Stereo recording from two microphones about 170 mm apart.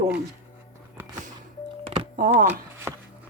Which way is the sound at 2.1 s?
55° right (ahead or behind).